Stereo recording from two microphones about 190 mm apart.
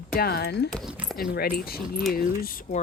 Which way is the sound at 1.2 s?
55° left (ahead or behind).